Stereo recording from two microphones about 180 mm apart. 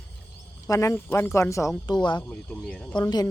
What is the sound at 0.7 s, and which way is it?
Speech, 15° left (ahead or behind).